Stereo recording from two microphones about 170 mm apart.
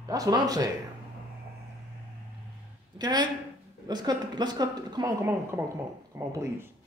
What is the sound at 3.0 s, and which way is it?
A man's voice, 25° right (ahead or behind).